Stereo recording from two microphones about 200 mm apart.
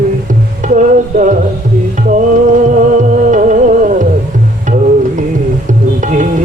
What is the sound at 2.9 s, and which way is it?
Music, 40° right (ahead or behind).